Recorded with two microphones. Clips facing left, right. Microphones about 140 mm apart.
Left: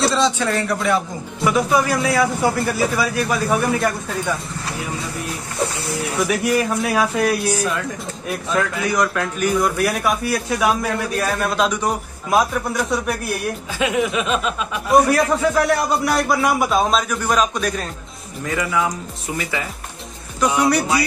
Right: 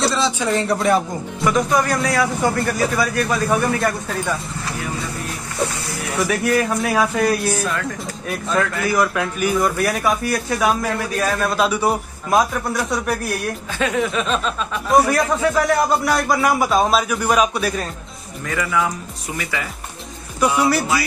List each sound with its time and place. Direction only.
0.0 s a sound: centre (ahead or behind)
0.4 s speech: 25° right (ahead or behind)
1.4 s speech: 5° left (ahead or behind)
6.1 s speech: centre (ahead or behind)
13.7 s speech: 10° left (ahead or behind); by 17.8 s 5° right (ahead or behind)
18.4 s speech: 25° left (ahead or behind)
20.3 s speech: 5° right (ahead or behind)